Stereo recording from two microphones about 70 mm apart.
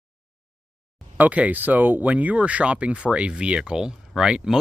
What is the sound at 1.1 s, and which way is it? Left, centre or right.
Speech, right.